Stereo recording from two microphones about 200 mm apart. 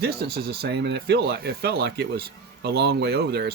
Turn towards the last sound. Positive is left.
turn(degrees=-55)  # may be behind; listen again after turning